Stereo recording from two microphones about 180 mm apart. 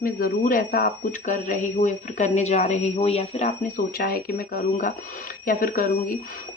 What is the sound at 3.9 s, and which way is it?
Speech, 55° left (ahead or behind).